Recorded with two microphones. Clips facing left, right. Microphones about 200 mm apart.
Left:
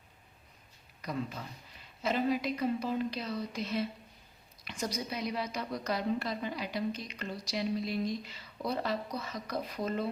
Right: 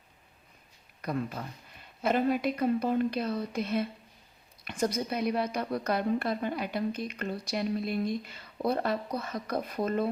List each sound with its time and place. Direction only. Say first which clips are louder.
1.0 s a woman's voice: right 4 dB; 55° right (ahead or behind)